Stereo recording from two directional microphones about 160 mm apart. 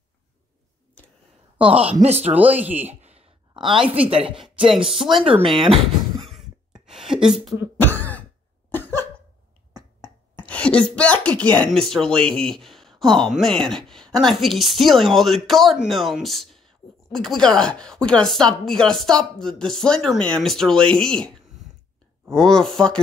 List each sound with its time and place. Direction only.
2.0 s speech: 40° right (ahead or behind)
2.2 s speech: 10° right (ahead or behind)
3.0 s a sound: 40° right (ahead or behind)
3.9 s a woman's voice: 35° right (ahead or behind)
4.8 s speech: centre (ahead or behind)
5.2 s a woman's voice: 35° right (ahead or behind)
5.9 s a sound: centre (ahead or behind)
7.8 s throat clearing: 10° left (ahead or behind)
9.8 s finger snapping: 25° right (ahead or behind)
10.5 s a sound: 5° left (ahead or behind)
11.0 s speech: 10° left (ahead or behind)